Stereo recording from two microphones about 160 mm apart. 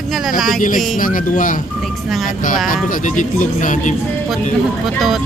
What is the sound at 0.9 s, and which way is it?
Speech, 55° left (ahead or behind).